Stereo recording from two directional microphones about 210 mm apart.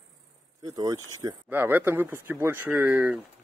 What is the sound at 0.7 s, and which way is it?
Speech, 15° right (ahead or behind).